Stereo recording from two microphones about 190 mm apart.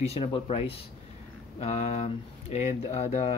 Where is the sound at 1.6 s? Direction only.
35° left (ahead or behind).